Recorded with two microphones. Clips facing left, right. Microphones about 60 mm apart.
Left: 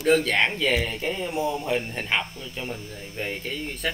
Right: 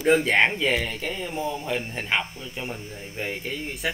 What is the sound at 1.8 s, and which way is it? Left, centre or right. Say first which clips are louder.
Speech: even; centre.